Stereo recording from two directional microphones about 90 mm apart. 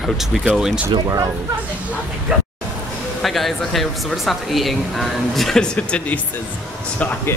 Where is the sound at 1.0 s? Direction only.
35° right (ahead or behind).